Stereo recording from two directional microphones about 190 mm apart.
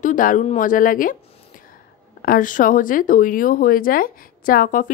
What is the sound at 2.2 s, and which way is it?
Speech, 45° left (ahead or behind).